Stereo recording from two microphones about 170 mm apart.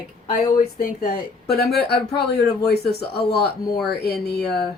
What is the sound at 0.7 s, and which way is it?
Speech, 60° left (ahead or behind).